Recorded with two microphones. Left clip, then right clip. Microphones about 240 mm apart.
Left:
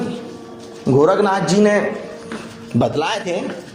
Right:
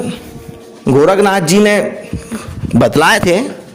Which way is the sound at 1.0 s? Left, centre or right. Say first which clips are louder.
Right 5 dB; right.